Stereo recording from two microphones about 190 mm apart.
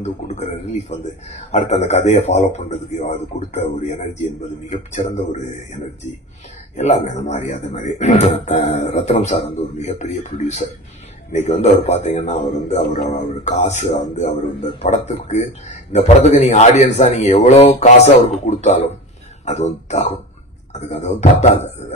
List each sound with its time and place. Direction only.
0.0 s speech: 35° left (ahead or behind)
4.6 s speech: 40° left (ahead or behind)
6.8 s speech: 35° left (ahead or behind)
13.4 s speech: 35° left (ahead or behind)